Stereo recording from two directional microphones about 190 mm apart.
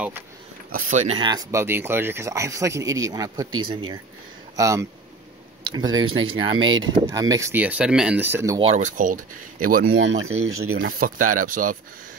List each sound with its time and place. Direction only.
0.7 s speech: 40° right (ahead or behind)
1.2 s speech: 20° right (ahead or behind)
8.5 s speech: 30° right (ahead or behind)
9.8 s speech: 90° right
10.9 s speech: 50° right (ahead or behind)